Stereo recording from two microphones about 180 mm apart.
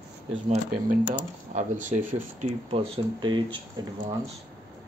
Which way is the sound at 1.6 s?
45° right (ahead or behind).